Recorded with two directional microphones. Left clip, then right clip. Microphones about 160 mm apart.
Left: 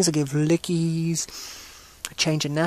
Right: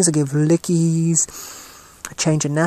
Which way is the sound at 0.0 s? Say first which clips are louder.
Right 4 dB; centre (ahead or behind).